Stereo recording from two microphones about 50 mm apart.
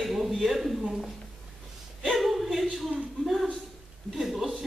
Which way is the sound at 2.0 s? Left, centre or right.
Centre.